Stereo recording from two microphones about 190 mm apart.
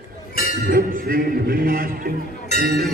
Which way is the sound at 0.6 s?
50° right (ahead or behind).